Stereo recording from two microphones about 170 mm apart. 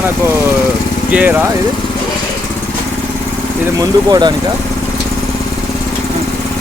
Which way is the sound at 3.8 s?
25° right (ahead or behind).